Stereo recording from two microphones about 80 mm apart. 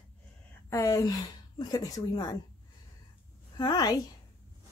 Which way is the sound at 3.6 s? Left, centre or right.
Left.